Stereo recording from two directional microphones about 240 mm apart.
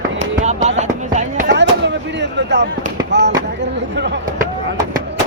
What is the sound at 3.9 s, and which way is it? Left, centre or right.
Speech, right.